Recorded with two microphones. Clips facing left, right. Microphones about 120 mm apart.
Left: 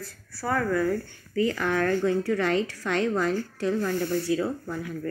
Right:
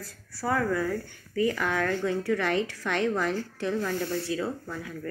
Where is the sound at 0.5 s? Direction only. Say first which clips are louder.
Left 1 dB; 15° right (ahead or behind).